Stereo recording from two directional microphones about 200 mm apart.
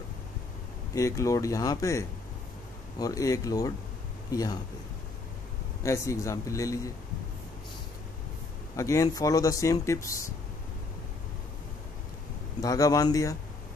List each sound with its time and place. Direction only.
0.9 s speech: 15° left (ahead or behind)
5.8 s speech: 15° left (ahead or behind)
8.7 s speech: 15° left (ahead or behind)
12.6 s speech: 15° left (ahead or behind)